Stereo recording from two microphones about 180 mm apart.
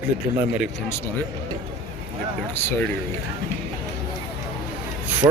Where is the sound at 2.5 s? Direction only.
10° left (ahead or behind).